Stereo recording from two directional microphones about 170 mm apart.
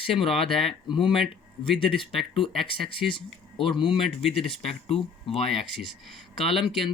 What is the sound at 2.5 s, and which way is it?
Speech, centre (ahead or behind).